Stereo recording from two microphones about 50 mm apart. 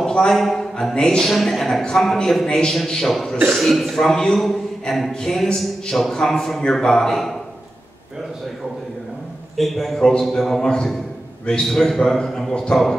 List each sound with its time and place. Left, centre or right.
0.0 s a sound: centre
0.4 s a man's voice: centre
9.6 s a man's voice: centre
11.6 s a man's voice: centre